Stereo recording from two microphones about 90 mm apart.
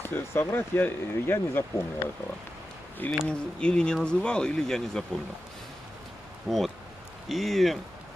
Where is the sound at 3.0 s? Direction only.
20° left (ahead or behind).